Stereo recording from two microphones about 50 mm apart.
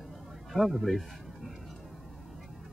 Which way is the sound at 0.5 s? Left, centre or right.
Centre.